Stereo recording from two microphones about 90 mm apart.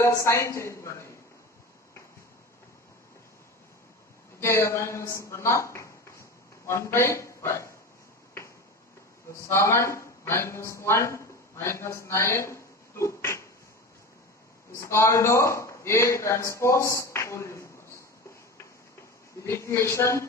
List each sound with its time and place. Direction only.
0.0 s a man's voice: 35° left (ahead or behind)
4.4 s a woman's voice: 30° left (ahead or behind)
9.4 s speech: 30° left (ahead or behind)
14.8 s a man's voice: 30° left (ahead or behind)
19.4 s a man's voice: 30° left (ahead or behind)